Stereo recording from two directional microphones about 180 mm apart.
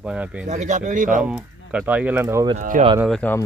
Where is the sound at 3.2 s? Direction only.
10° left (ahead or behind).